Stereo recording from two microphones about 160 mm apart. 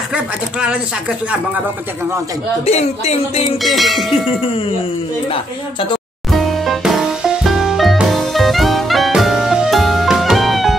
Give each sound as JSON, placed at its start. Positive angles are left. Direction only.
{"t": 0.1, "sound": "speech", "side_deg": -5}
{"t": 2.6, "sound": "speech", "side_deg": 40}
{"t": 3.6, "sound": "a sound", "side_deg": 0}
{"t": 5.3, "sound": "speech", "side_deg": 35}
{"t": 6.3, "sound": "music", "side_deg": 0}